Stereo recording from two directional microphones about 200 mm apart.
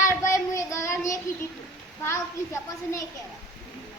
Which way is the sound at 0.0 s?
15° left (ahead or behind).